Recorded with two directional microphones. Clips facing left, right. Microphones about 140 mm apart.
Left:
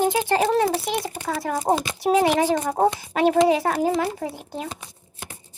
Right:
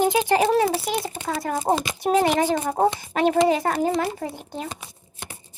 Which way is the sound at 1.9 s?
Centre (ahead or behind).